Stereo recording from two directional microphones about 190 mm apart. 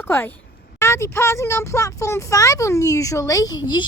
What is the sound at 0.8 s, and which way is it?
A woman's voice, 15° left (ahead or behind).